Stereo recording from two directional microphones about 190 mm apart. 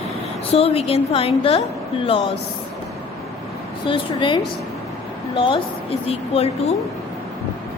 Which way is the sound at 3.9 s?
25° left (ahead or behind).